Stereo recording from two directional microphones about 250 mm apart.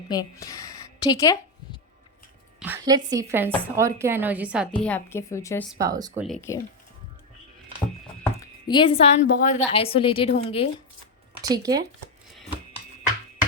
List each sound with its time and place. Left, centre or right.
0.1 s a woman's voice: centre
2.6 s a woman's voice: centre
4.8 s a woman's voice: centre
5.7 s a woman's voice: centre
6.2 s speech: centre
8.2 s a woman's voice: centre
11.4 s a woman's voice: centre